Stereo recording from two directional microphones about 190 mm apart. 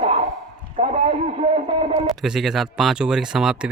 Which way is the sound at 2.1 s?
Centre (ahead or behind).